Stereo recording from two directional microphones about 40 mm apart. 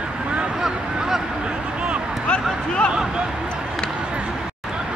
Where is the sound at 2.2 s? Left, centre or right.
Left.